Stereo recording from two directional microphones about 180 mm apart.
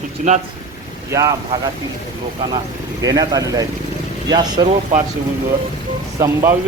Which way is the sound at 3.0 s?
20° right (ahead or behind).